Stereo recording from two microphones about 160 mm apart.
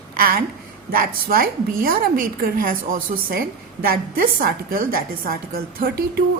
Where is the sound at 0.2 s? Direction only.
65° right (ahead or behind).